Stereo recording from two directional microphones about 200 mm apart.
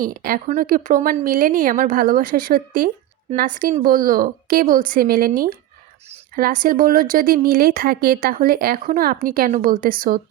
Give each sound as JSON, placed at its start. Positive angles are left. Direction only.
{"t": 0.0, "sound": "speech", "side_deg": -45}